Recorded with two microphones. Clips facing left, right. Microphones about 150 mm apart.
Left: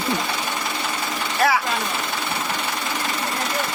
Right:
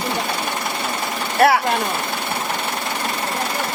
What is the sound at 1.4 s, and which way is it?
Speech, 60° right (ahead or behind).